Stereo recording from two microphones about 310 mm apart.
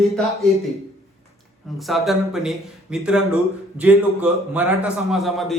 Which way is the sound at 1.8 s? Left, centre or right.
Centre.